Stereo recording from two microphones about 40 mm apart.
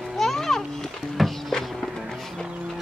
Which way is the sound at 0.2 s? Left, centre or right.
Centre.